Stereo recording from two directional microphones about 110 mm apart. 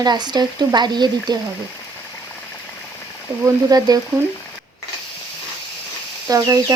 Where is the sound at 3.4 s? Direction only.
35° right (ahead or behind).